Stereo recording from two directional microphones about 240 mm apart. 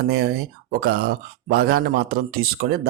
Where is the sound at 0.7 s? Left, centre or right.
Right.